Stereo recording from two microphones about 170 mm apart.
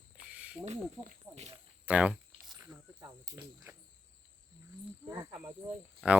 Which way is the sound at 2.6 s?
20° right (ahead or behind).